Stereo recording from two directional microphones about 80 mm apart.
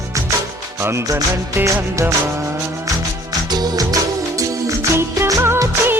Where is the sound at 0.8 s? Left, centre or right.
Right.